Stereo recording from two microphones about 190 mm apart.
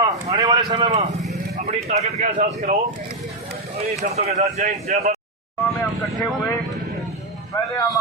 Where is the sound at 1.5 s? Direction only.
35° right (ahead or behind).